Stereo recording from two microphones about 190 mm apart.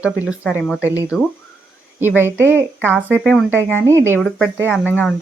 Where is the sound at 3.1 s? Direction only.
10° left (ahead or behind).